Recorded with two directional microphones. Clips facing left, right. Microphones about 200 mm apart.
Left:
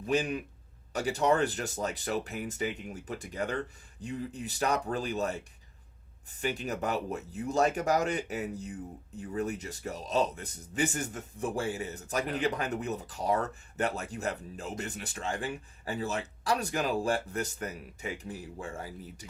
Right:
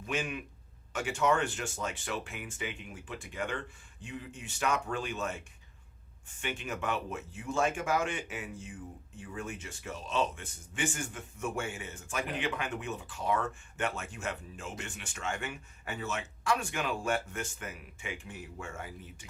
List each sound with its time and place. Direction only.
0.0 s speech: 35° left (ahead or behind)